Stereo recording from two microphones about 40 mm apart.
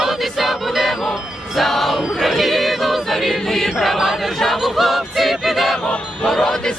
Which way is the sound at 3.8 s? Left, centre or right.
Centre.